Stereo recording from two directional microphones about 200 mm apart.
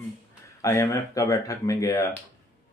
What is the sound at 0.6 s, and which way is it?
Speech, 15° left (ahead or behind).